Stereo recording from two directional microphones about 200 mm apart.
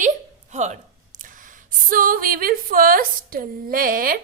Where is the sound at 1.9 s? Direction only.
45° right (ahead or behind).